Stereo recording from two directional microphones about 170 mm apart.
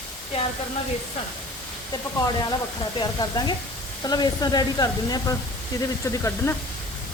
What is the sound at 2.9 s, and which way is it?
Speech, 25° left (ahead or behind).